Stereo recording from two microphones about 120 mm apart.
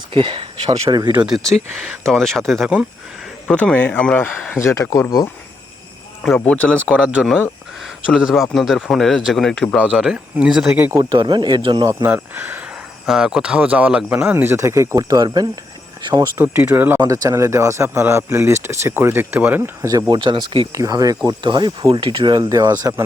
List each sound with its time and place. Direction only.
0.1 s speech: 45° right (ahead or behind)
1.3 s a man's voice: 5° left (ahead or behind)
4.6 s speech: 25° left (ahead or behind)
6.3 s speech: 10° left (ahead or behind)
6.9 s a man's voice: 10° right (ahead or behind)
11.1 s speech: 35° right (ahead or behind)
12.0 s speech: 15° right (ahead or behind)
13.1 s speech: 5° right (ahead or behind); by 15.4 s 35° right (ahead or behind)
16.3 s speech: 15° right (ahead or behind)
17.0 s speech: 30° right (ahead or behind)
19.9 s speech: 35° right (ahead or behind)
20.7 s speech: 30° right (ahead or behind)